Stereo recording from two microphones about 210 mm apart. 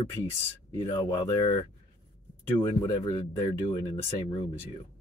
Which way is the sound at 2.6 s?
20° left (ahead or behind).